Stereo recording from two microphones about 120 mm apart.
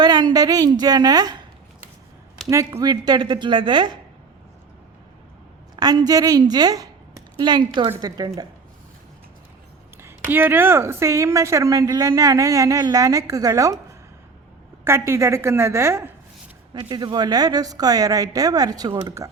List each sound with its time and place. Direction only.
0.0 s a woman's voice: 35° right (ahead or behind)
2.5 s a woman's voice: 25° right (ahead or behind)
5.7 s a woman's voice: 35° right (ahead or behind)
10.2 s a woman's voice: 15° right (ahead or behind)
14.8 s a woman's voice: 20° right (ahead or behind)
16.7 s a woman's voice: 35° right (ahead or behind)